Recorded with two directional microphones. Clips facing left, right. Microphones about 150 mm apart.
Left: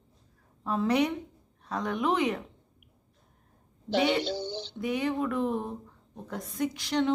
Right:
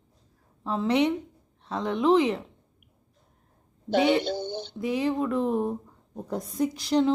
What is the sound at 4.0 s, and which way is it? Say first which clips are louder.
Speech: right 4 dB; 20° right (ahead or behind).